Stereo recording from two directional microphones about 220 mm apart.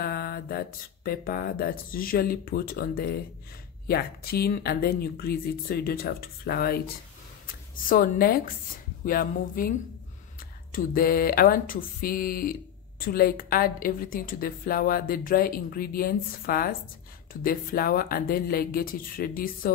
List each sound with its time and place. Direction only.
0.0 s a woman's voice: 45° left (ahead or behind)
10.7 s a woman's voice: 40° left (ahead or behind)